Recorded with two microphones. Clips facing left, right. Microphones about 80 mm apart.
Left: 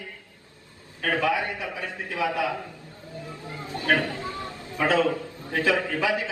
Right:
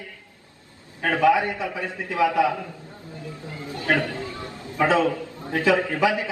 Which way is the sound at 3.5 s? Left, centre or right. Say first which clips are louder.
Even; left.